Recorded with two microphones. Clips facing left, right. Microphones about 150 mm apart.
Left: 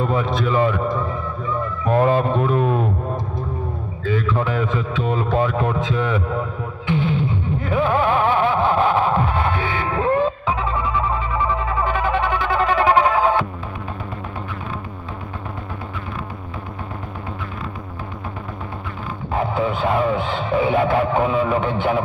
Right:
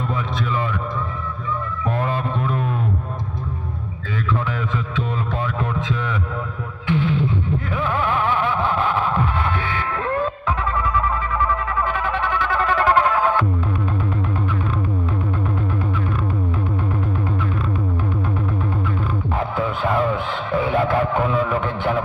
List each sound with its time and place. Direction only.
0.0 s speech: 40° left (ahead or behind)
4.4 s speech: 35° left (ahead or behind)
7.7 s music: 25° left (ahead or behind)
19.4 s music: 20° left (ahead or behind)